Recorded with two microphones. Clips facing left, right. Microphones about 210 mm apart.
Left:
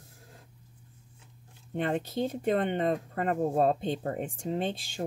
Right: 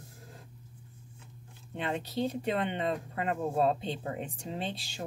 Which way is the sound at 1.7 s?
50° left (ahead or behind).